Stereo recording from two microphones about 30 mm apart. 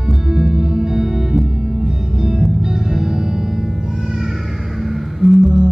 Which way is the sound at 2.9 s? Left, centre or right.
Centre.